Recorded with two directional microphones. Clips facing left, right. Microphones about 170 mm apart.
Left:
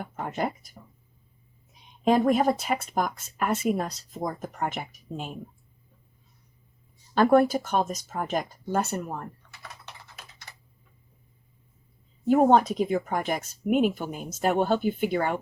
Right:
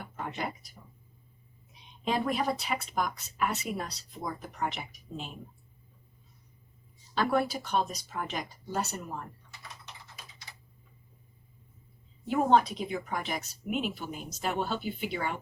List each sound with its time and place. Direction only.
0.0 s speech: 50° left (ahead or behind)
2.0 s speech: 45° left (ahead or behind)
7.1 s speech: 50° left (ahead or behind)
12.2 s speech: 45° left (ahead or behind)